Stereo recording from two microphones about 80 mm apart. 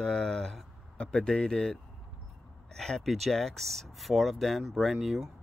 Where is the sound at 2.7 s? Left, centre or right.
Centre.